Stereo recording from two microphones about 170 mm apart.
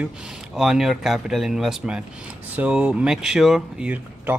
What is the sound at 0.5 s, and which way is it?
Speech, centre (ahead or behind).